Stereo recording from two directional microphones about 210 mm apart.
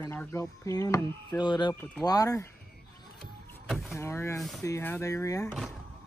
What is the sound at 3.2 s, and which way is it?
Vehicle, centre (ahead or behind).